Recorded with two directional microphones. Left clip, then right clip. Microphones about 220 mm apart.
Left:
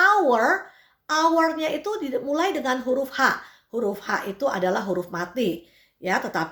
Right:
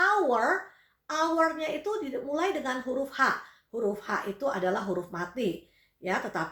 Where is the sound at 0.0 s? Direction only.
50° left (ahead or behind).